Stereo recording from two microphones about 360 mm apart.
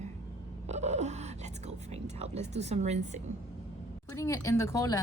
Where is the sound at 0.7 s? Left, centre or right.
Centre.